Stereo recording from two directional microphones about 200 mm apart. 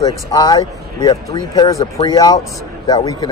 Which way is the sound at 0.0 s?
20° left (ahead or behind).